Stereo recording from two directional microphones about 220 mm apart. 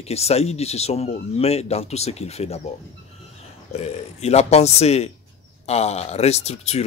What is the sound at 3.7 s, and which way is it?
Speech, 30° left (ahead or behind).